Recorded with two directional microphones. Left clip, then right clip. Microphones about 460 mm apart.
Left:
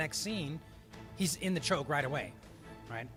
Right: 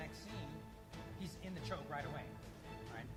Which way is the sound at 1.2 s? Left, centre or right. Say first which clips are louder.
Left 18 dB; left.